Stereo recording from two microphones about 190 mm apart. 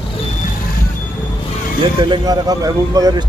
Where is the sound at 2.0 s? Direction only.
20° right (ahead or behind).